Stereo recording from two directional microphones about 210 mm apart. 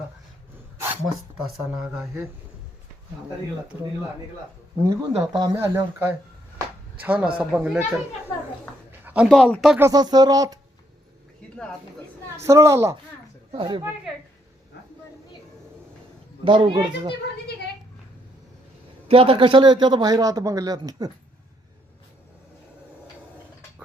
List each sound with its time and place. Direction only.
0.5 s a sound: 10° right (ahead or behind)
1.7 s speech: 5° right (ahead or behind)
4.8 s speech: 15° right (ahead or behind)
8.9 s speech: 5° right (ahead or behind)
12.4 s speech: 15° right (ahead or behind)
13.5 s a man's voice: 25° right (ahead or behind)
16.4 s a man's voice: 25° right (ahead or behind)
19.0 s a man's voice: 25° right (ahead or behind)